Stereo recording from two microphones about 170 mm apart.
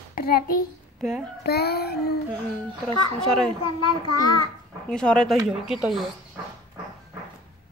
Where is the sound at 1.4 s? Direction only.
70° left (ahead or behind).